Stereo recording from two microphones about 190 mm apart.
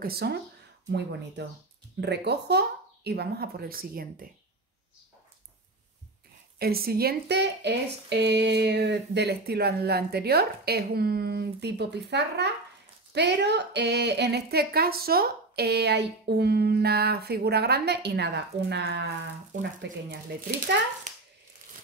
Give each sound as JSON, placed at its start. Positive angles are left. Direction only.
{"t": 0.0, "sound": "a woman's voice", "side_deg": -55}
{"t": 6.6, "sound": "a woman's voice", "side_deg": -55}